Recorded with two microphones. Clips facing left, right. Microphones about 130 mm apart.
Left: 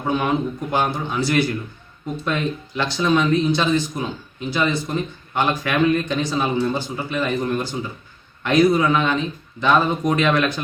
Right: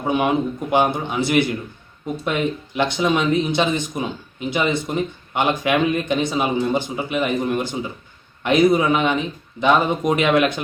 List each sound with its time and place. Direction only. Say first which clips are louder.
0.0 s speech: right 2 dB; 15° right (ahead or behind)